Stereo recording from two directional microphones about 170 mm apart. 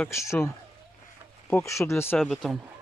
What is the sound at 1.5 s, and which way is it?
Speech, 15° left (ahead or behind).